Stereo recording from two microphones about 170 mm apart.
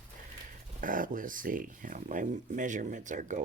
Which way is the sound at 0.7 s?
55° right (ahead or behind).